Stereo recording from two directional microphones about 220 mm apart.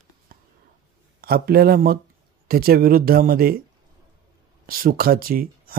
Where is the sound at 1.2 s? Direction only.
45° right (ahead or behind).